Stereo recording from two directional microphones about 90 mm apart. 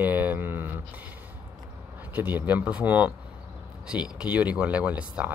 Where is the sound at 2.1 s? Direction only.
20° right (ahead or behind).